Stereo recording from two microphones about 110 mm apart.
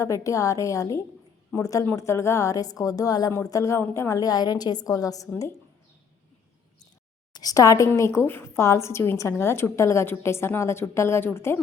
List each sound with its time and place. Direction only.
0.0 s a woman's voice: 30° left (ahead or behind)
7.3 s a woman's voice: 35° left (ahead or behind)